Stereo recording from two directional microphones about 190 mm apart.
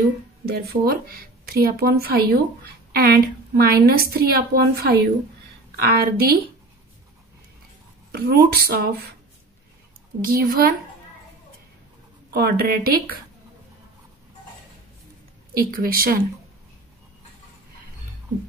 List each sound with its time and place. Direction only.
0.5 s a woman's voice: 55° right (ahead or behind)
8.1 s a woman's voice: 55° right (ahead or behind)
10.2 s a woman's voice: 50° right (ahead or behind)
12.3 s a woman's voice: 55° right (ahead or behind)
15.5 s a woman's voice: 50° right (ahead or behind)